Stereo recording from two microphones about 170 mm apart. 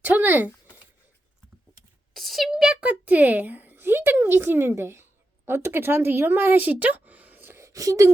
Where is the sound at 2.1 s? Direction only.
Centre (ahead or behind).